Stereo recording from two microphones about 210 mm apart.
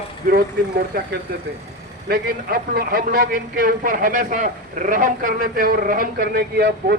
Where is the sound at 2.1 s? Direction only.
45° right (ahead or behind).